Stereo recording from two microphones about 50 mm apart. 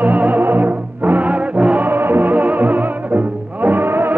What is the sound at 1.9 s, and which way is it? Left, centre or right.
Music, right.